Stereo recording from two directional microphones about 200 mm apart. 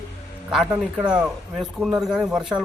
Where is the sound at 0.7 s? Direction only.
5° right (ahead or behind).